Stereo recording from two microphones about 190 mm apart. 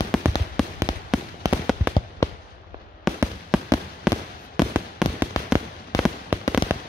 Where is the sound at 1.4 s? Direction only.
20° right (ahead or behind).